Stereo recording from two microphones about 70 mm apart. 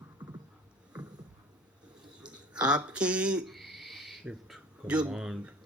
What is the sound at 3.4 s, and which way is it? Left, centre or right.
Owl, centre.